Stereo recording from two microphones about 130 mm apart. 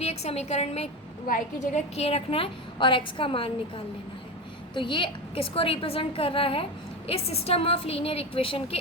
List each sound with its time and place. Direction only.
0.0 s a woman's voice: 55° left (ahead or behind)
1.3 s a woman's voice: 65° left (ahead or behind); by 8.8 s 45° left (ahead or behind)